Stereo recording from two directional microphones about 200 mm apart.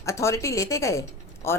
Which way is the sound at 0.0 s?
15° left (ahead or behind).